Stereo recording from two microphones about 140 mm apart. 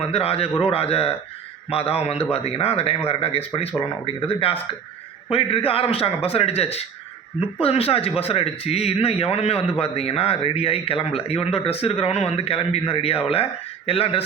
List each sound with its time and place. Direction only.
0.1 s a man's voice: 45° left (ahead or behind)